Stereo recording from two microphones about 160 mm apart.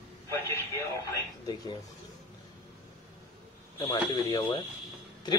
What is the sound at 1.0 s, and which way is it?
Speech, 25° left (ahead or behind).